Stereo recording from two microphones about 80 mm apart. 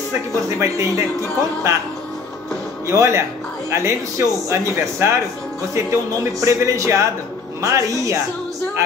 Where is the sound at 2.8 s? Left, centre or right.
Right.